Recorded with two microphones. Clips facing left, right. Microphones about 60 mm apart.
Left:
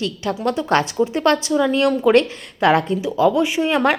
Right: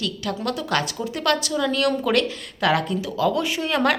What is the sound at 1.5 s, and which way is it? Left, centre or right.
A woman's voice, centre.